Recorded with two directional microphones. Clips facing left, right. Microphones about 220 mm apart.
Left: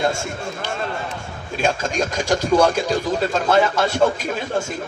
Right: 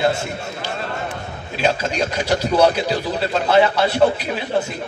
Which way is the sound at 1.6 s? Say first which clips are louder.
Right 1 dB; 45° left (ahead or behind).